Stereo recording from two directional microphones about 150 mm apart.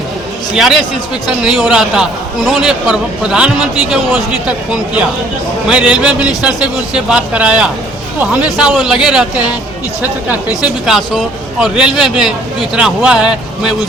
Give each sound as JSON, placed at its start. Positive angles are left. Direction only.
{"t": 0.5, "sound": "a man's voice", "side_deg": 0}
{"t": 10.6, "sound": "a man's voice", "side_deg": 0}